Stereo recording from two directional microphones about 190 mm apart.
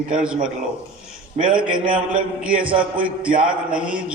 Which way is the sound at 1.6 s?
5° right (ahead or behind).